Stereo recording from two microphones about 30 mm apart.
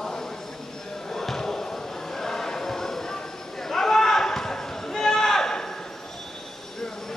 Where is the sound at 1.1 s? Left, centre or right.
Centre.